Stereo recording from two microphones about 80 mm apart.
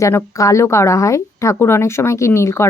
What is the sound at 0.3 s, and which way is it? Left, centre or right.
Speech, left.